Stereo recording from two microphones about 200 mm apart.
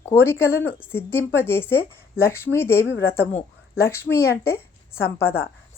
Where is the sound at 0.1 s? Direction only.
10° left (ahead or behind).